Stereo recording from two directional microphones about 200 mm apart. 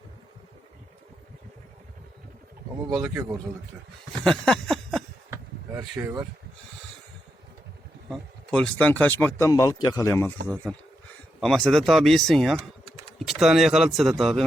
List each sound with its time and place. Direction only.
3.0 s a man's voice: 15° right (ahead or behind)
4.2 s a sound: centre (ahead or behind)
5.7 s speech: 10° right (ahead or behind)
8.1 s speech: 5° left (ahead or behind)
10.7 s speech: centre (ahead or behind)